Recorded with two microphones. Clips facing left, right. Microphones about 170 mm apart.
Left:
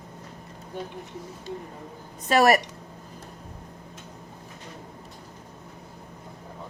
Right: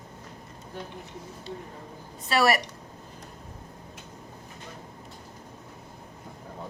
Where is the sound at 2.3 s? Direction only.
45° left (ahead or behind).